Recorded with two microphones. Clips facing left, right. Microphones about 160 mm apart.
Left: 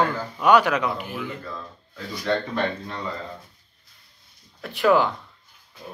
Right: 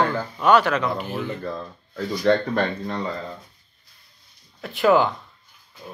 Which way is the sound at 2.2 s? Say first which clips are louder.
Right 4 dB; 50° right (ahead or behind).